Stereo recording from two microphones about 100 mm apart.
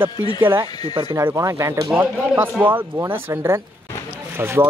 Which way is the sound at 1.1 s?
30° right (ahead or behind).